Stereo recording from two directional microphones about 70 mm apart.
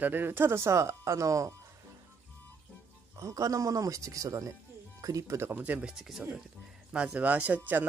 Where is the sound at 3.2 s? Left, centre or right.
Right.